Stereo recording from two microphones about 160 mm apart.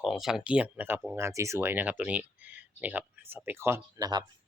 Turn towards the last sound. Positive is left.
turn(degrees=-20)  # may be behind; listen again after turning